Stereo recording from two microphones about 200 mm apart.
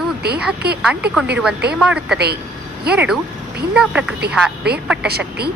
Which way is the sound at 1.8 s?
5° right (ahead or behind).